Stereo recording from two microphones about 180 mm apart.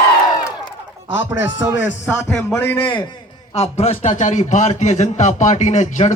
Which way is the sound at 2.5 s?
10° left (ahead or behind).